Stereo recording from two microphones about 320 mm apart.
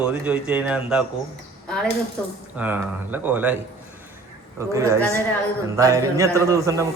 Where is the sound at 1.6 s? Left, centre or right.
Centre.